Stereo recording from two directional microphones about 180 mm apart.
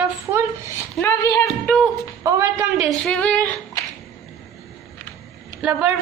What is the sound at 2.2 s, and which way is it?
Speech, 15° right (ahead or behind).